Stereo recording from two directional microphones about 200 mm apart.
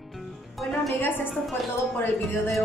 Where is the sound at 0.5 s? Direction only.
5° left (ahead or behind).